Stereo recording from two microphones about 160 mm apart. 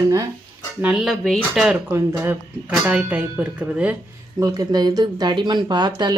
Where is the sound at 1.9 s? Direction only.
15° right (ahead or behind).